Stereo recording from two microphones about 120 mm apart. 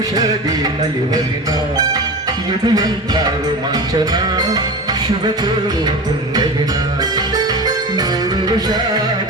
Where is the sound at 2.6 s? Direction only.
35° right (ahead or behind).